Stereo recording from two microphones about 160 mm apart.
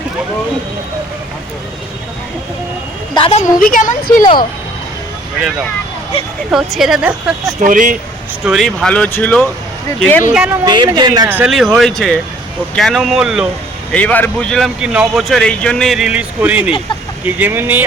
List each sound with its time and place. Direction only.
3.2 s a woman's voice: 35° left (ahead or behind)
3.6 s speech: 60° left (ahead or behind)
6.5 s speech: 5° right (ahead or behind)
7.6 s speech: 55° right (ahead or behind)
8.4 s speech: centre (ahead or behind)
10.3 s speech: 5° right (ahead or behind)
10.7 s speech: 25° right (ahead or behind)
11.3 s speech: 10° right (ahead or behind)
11.5 s speech: centre (ahead or behind)
13.9 s speech: 10° left (ahead or behind); by 17.8 s 10° right (ahead or behind)